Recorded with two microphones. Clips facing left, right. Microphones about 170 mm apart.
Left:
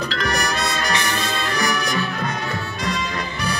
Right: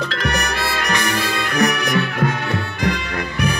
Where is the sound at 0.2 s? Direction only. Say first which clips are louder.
Left 1 dB; 65° right (ahead or behind).